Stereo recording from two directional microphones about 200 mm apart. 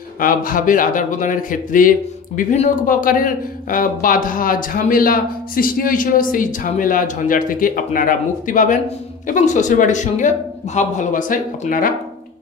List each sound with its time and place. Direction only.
0.2 s a man's voice: 45° left (ahead or behind)